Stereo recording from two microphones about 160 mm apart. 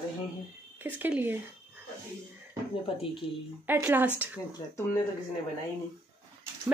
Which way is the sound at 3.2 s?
35° left (ahead or behind).